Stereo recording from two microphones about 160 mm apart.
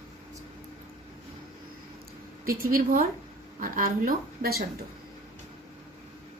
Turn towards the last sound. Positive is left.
turn(degrees=-65)  # may be behind; listen again after turning